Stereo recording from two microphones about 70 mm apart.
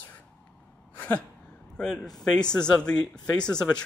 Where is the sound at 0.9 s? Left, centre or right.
Centre.